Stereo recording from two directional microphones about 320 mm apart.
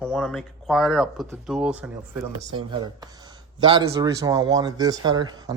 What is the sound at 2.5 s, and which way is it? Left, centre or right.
Speech, centre.